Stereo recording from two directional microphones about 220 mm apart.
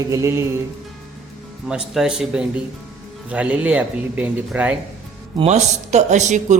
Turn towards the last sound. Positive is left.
turn(degrees=-30)  # may be behind; listen again after turning